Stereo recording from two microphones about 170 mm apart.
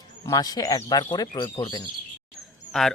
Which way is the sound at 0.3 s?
25° left (ahead or behind).